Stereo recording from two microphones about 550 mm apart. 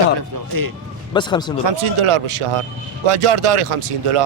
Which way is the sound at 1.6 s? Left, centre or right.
Right.